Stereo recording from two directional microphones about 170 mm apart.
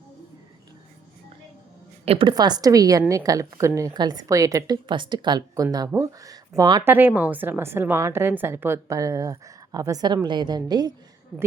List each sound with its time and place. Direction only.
2.0 s a woman's voice: 30° right (ahead or behind)
6.9 s a woman's voice: 10° right (ahead or behind)